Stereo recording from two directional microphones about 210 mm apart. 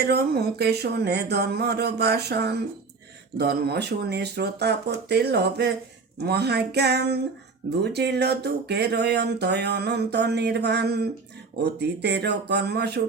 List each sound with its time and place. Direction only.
0.0 s speech: 50° right (ahead or behind)